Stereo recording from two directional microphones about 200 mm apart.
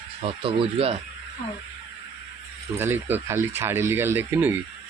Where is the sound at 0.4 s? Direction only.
30° right (ahead or behind).